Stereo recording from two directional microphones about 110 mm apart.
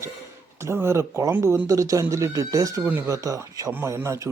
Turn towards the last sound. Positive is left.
turn(degrees=-25)  # may be behind; listen again after turning